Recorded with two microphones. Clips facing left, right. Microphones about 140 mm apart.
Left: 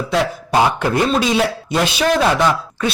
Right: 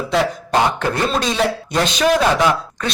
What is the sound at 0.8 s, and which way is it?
A man's voice, 10° left (ahead or behind).